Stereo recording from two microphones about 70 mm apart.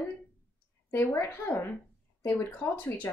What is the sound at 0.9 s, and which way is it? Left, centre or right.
A woman's voice, left.